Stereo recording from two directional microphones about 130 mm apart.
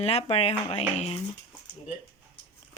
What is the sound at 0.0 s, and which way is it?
Dishes, 55° left (ahead or behind).